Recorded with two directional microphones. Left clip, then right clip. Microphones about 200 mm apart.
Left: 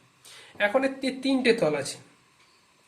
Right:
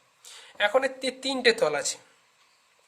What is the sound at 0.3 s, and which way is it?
Speech, 40° right (ahead or behind).